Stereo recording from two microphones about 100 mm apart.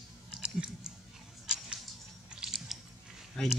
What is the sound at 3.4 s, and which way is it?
Speech, 10° left (ahead or behind).